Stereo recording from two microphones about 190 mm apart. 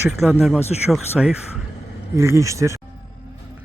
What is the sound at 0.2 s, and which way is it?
Speech, 5° right (ahead or behind).